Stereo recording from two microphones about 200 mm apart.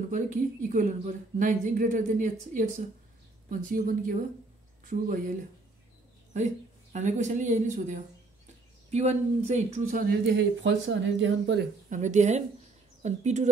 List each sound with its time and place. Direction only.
0.1 s a woman's voice: 40° right (ahead or behind)
6.3 s speech: 35° right (ahead or behind); by 11.6 s 70° right (ahead or behind)
11.9 s a woman's voice: 35° right (ahead or behind)